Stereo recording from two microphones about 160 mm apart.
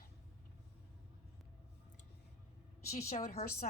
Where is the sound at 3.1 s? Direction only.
45° left (ahead or behind).